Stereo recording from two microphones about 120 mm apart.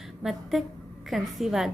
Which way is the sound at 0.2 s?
5° right (ahead or behind).